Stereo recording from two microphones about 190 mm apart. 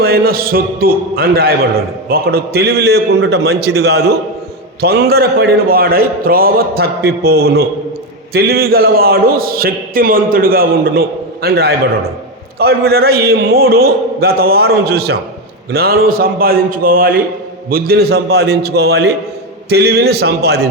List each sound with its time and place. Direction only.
0.0 s a man's voice: 55° right (ahead or behind)